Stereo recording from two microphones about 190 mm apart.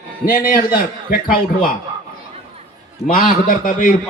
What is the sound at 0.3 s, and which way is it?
A man's voice, 45° left (ahead or behind).